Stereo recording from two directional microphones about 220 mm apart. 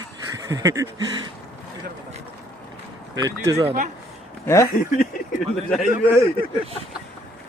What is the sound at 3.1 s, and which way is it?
Speech, 15° right (ahead or behind).